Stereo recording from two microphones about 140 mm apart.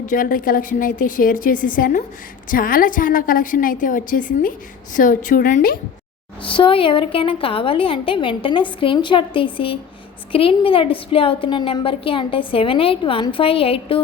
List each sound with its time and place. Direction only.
0.0 s a woman's voice: 75° left (ahead or behind)
2.5 s a woman's voice: 90° left
6.4 s a woman's voice: 40° left (ahead or behind)